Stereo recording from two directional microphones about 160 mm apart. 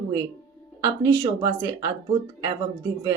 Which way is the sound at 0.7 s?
25° right (ahead or behind).